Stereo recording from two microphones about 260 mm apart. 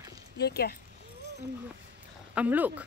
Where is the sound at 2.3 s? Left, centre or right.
Centre.